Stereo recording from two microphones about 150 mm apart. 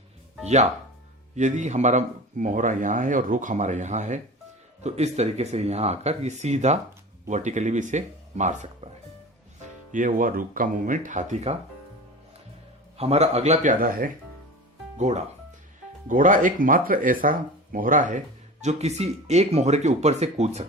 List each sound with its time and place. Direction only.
0.4 s speech: 50° right (ahead or behind)
9.9 s speech: 65° right (ahead or behind)
13.0 s speech: 45° right (ahead or behind); by 14.1 s 65° right (ahead or behind)
14.9 s speech: 50° right (ahead or behind)
16.0 s speech: 60° right (ahead or behind)
18.6 s speech: 45° right (ahead or behind)